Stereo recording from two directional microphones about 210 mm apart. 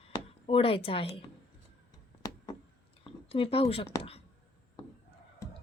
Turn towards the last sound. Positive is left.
turn(degrees=25)  # may be behind; listen again after turning